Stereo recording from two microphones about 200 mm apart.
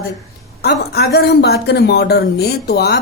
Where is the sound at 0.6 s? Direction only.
55° left (ahead or behind).